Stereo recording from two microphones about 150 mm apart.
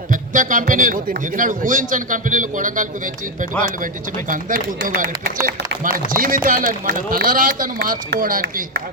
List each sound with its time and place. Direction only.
0.1 s speech: 60° right (ahead or behind)
4.3 s speech: 60° right (ahead or behind); by 5.3 s 90° right
6.1 s speech: 70° right (ahead or behind)